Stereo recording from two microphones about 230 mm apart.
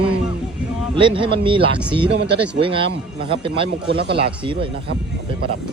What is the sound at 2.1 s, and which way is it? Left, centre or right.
Speech, right.